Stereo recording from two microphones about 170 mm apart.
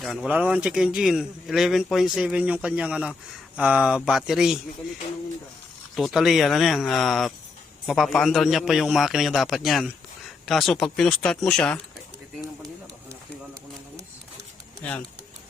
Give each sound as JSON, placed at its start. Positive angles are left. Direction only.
{"t": 0.0, "sound": "a man's voice", "side_deg": 0}
{"t": 6.0, "sound": "a man's voice", "side_deg": 0}
{"t": 12.6, "sound": "a sound", "side_deg": -15}
{"t": 14.8, "sound": "speech", "side_deg": 10}